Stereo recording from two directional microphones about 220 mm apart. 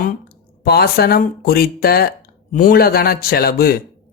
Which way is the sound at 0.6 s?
45° left (ahead or behind).